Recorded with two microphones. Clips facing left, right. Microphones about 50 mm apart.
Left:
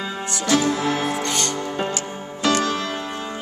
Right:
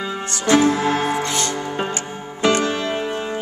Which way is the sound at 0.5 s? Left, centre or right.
Right.